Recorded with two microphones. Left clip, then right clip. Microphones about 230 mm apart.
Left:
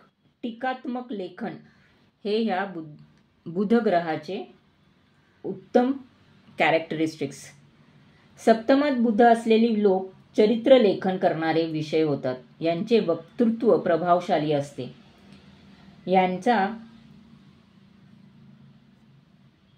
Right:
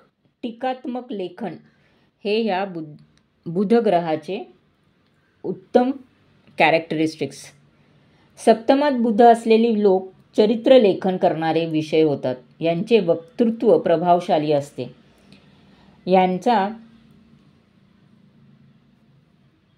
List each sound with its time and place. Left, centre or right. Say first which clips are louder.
0.4 s speech: right 4 dB; right
5.7 s speech: right 4 dB; right
16.1 s speech: right 4 dB; right